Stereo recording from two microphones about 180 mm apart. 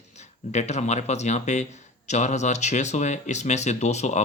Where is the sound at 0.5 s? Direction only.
40° left (ahead or behind).